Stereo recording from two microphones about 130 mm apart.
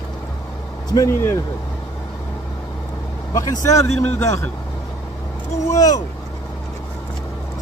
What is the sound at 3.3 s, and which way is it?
Speech, 25° left (ahead or behind).